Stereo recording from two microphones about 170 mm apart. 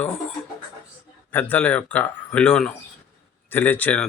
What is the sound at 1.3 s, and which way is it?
A man's voice, 10° left (ahead or behind).